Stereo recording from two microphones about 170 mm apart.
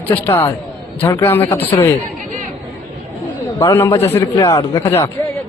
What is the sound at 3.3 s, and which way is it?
Speech, 15° left (ahead or behind).